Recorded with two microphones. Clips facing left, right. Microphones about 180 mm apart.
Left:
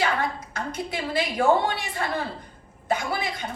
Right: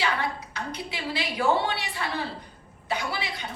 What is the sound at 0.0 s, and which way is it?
A woman's voice, 45° left (ahead or behind).